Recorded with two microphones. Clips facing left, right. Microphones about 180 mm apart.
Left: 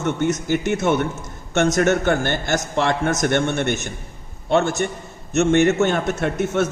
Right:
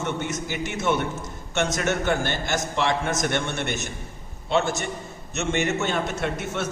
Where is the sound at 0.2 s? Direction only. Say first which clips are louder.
Left 8 dB; 50° left (ahead or behind).